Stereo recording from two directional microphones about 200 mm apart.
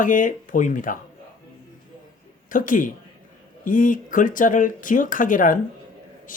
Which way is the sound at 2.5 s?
40° left (ahead or behind).